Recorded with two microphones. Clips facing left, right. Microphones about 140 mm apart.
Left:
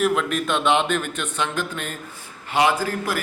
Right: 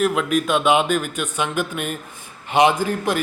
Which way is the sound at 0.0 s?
5° right (ahead or behind).